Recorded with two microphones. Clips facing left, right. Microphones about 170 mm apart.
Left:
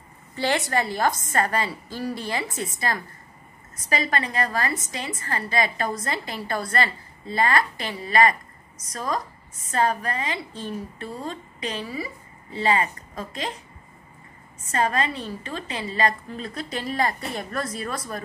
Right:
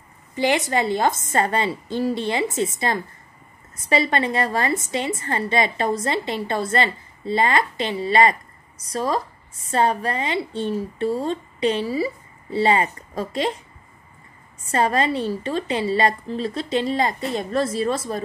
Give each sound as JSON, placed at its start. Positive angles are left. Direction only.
{"t": 0.4, "sound": "a woman's voice", "side_deg": -20}
{"t": 14.7, "sound": "a woman's voice", "side_deg": -30}